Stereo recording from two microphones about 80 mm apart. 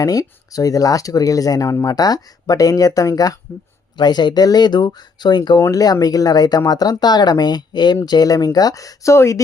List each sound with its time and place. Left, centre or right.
0.0 s speech: left
3.9 s speech: left
5.7 s speech: left